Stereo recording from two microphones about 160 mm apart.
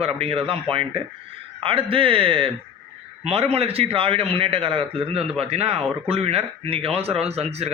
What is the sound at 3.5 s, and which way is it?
Speech, 40° right (ahead or behind).